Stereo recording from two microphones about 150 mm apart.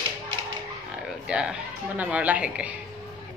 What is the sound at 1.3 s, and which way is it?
A woman's voice, 5° right (ahead or behind).